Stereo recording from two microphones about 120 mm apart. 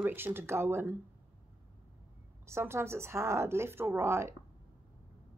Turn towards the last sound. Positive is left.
turn(degrees=-20)  # may be behind; listen again after turning